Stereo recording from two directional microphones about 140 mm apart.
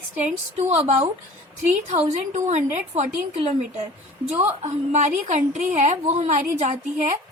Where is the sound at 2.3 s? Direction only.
60° right (ahead or behind).